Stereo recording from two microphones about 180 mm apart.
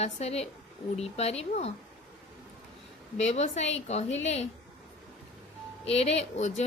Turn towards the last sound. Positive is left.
turn(degrees=40)  # may be behind; listen again after turning